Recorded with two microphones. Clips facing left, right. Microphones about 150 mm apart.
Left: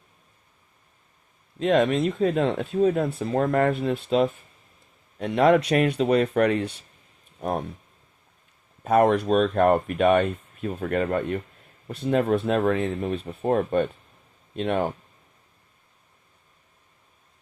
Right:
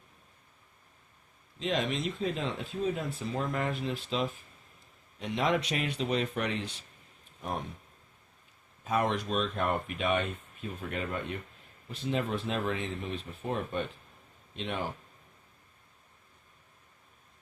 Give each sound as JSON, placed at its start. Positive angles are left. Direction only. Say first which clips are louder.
{"t": 1.5, "sound": "speech", "louder": "left 11 dB", "side_deg": 55}
{"t": 8.8, "sound": "speech", "louder": "left 11 dB", "side_deg": 55}